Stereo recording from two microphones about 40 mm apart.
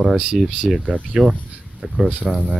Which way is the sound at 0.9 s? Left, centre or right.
Centre.